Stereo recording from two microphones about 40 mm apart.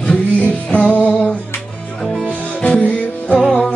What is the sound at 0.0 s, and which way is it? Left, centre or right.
Music, left.